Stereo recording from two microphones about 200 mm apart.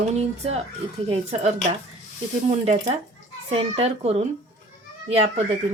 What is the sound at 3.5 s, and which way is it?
A woman's voice, 30° right (ahead or behind).